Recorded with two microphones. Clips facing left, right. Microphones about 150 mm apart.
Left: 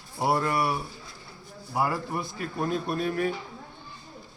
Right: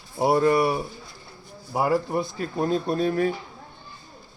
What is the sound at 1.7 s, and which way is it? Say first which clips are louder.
Speech: right 5 dB; 25° right (ahead or behind).